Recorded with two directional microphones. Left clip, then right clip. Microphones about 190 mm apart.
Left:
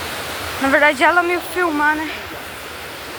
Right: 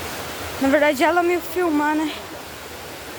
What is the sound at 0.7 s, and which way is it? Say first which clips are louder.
Speech: left 4 dB; 35° right (ahead or behind).